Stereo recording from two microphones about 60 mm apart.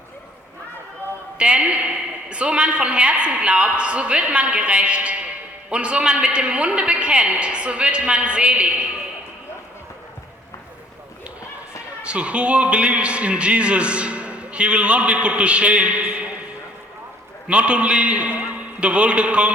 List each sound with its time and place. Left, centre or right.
1.4 s a man's voice: centre
12.0 s a man's voice: centre
17.5 s a man's voice: centre